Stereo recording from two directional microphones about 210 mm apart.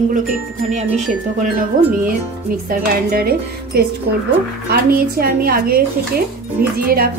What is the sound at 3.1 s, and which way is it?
A woman's voice, 45° right (ahead or behind).